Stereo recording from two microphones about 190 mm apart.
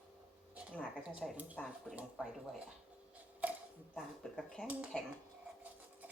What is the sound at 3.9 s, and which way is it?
Speech, centre (ahead or behind).